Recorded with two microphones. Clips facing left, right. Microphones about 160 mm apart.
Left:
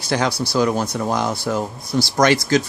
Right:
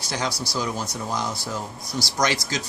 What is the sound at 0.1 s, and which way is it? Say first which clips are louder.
Speech: left 8 dB; 60° left (ahead or behind).